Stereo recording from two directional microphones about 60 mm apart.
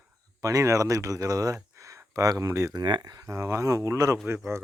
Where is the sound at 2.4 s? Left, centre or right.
Right.